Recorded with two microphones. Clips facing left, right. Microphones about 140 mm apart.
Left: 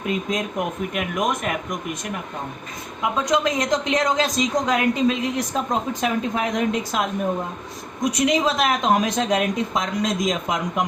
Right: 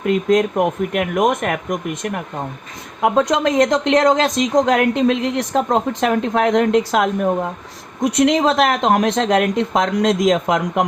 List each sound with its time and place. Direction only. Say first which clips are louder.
0.0 s speech: right 9 dB; 70° right (ahead or behind)